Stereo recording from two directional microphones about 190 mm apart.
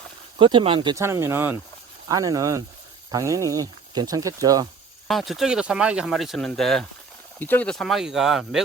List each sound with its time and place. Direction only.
0.3 s speech: 25° right (ahead or behind)
1.0 s speech: 15° right (ahead or behind)
5.0 s speech: centre (ahead or behind)